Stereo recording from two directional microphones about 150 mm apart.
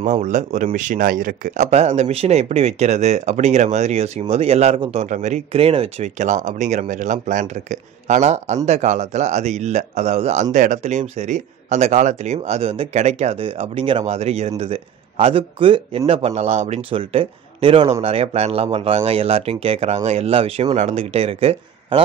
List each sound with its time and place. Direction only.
0.0 s speech: 55° right (ahead or behind)